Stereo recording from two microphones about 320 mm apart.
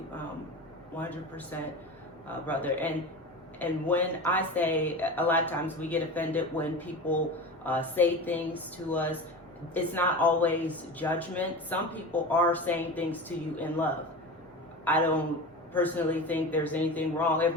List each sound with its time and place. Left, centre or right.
0.9 s speech: centre